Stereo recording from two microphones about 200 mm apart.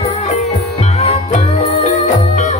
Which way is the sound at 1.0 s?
30° left (ahead or behind).